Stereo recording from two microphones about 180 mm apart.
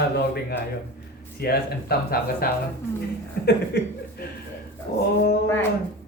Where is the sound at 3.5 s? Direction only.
60° left (ahead or behind).